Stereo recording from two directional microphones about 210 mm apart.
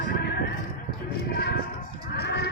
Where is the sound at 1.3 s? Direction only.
50° left (ahead or behind).